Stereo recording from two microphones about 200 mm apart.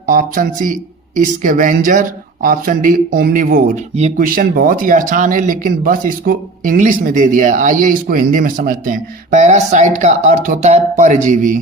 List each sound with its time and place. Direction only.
0.0 s speech: 45° right (ahead or behind)